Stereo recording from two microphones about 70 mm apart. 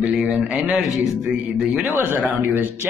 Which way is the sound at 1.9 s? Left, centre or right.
Right.